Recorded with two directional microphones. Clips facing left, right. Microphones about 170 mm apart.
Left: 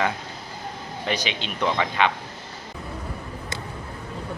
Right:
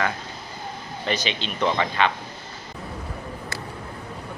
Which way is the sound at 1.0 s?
10° left (ahead or behind).